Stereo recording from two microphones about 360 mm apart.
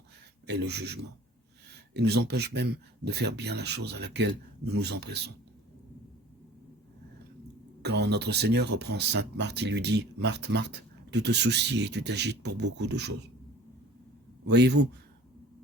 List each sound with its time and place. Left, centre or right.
0.4 s speech: right
7.8 s speech: right
14.4 s speech: right